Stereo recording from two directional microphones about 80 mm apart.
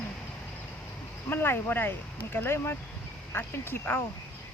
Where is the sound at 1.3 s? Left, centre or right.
Left.